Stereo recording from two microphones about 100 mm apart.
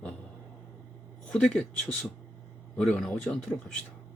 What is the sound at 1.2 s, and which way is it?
Speech, 5° left (ahead or behind).